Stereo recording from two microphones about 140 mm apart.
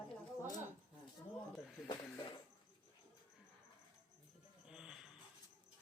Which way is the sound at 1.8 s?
35° left (ahead or behind).